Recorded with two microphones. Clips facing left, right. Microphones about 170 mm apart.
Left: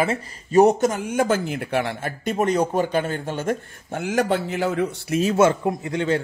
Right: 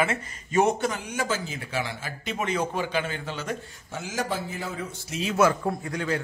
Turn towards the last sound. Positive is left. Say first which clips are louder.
# left 6 dB
turn(degrees=25)  # may be behind; listen again after turning